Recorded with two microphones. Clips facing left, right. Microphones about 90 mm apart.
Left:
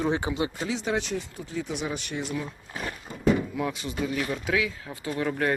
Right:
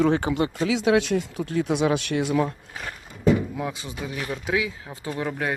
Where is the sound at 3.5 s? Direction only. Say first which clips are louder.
Left 1 dB; 20° right (ahead or behind).